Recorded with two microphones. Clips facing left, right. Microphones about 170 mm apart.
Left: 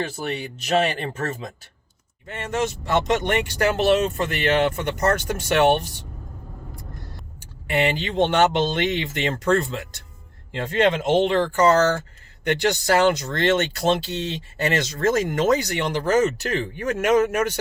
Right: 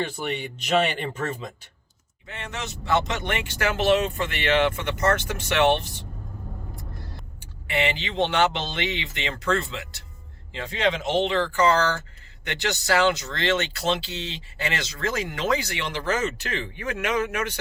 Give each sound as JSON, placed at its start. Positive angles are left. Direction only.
{"t": 0.2, "sound": "speech", "side_deg": 35}
{"t": 2.2, "sound": "speech", "side_deg": 45}
{"t": 7.7, "sound": "speech", "side_deg": 50}